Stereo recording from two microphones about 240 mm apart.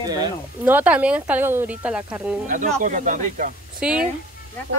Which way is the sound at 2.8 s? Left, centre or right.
Right.